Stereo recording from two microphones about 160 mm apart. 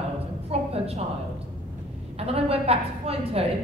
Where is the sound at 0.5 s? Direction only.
40° right (ahead or behind).